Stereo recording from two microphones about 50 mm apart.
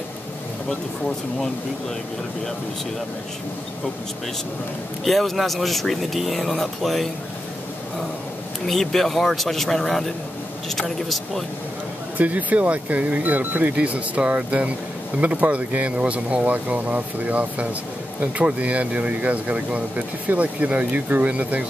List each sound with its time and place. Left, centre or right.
5.0 s speech: centre
8.6 s speech: centre
12.2 s speech: right